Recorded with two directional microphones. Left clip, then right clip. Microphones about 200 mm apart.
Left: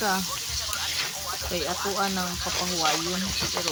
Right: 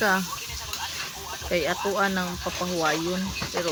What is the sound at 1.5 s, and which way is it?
Speech, 20° right (ahead or behind).